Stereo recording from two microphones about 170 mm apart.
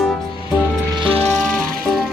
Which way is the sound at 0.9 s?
30° right (ahead or behind).